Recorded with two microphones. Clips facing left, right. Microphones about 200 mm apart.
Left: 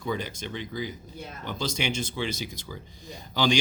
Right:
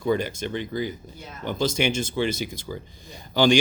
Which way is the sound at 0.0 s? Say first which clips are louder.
Right 7 dB; 55° right (ahead or behind).